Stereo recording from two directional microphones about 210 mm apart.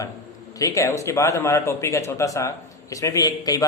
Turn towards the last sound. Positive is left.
turn(degrees=15)  # may be behind; listen again after turning